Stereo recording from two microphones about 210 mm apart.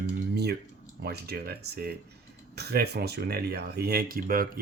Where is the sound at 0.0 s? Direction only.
50° right (ahead or behind).